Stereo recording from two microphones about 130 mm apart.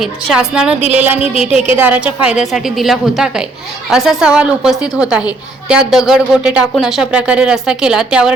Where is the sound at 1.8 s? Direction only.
10° right (ahead or behind).